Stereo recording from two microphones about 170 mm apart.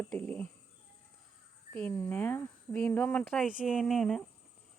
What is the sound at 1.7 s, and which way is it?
Speech, 10° left (ahead or behind).